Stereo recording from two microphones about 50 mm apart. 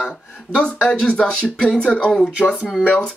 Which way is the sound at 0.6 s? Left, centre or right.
Centre.